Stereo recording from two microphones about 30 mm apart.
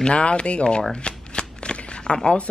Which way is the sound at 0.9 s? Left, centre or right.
Left.